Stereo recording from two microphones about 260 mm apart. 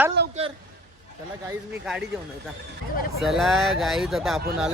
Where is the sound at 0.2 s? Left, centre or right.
Right.